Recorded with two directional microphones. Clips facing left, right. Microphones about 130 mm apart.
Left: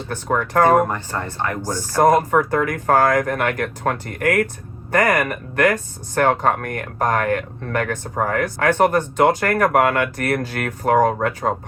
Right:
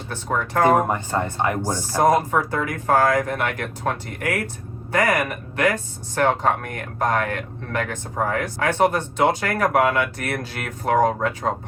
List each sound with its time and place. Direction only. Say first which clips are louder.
0.1 s speech: left 3 dB; 50° left (ahead or behind)
0.9 s speech: right 3 dB; 20° right (ahead or behind)
2.0 s speech: left 3 dB; 50° left (ahead or behind)